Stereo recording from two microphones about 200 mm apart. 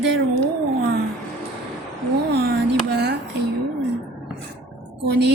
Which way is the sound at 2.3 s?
55° right (ahead or behind).